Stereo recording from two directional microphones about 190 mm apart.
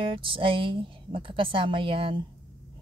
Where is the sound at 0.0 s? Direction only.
25° right (ahead or behind).